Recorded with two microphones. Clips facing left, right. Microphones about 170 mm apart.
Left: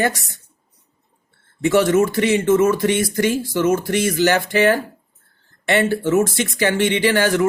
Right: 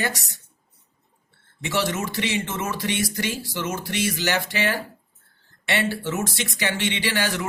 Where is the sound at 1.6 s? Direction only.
50° left (ahead or behind).